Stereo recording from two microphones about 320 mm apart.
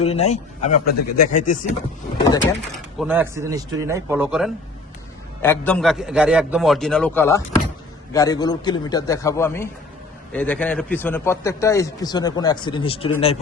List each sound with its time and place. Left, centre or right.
0.0 s a man's voice: centre
0.9 s speech: left
1.3 s a man's voice: left
3.0 s a man's voice: centre